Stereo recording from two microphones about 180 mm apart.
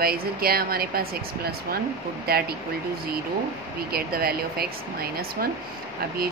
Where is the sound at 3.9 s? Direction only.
55° right (ahead or behind).